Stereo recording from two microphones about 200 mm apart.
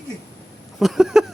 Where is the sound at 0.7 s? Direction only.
Centre (ahead or behind).